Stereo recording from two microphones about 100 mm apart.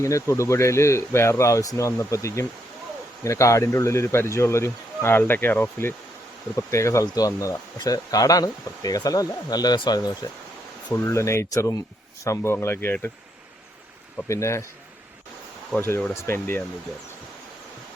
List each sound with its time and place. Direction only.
0.0 s speech: 30° left (ahead or behind)
10.9 s speech: 30° left (ahead or behind)
14.3 s speech: 30° left (ahead or behind)
16.1 s speech: 25° left (ahead or behind)